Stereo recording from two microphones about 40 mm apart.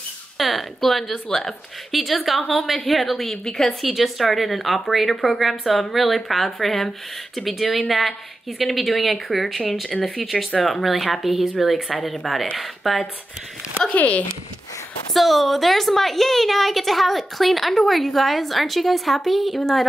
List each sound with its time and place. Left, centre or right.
0.4 s a woman's voice: centre
3.4 s a woman's voice: centre
3.8 s a woman's voice: centre
13.9 s speech: left
15.1 s a woman's voice: centre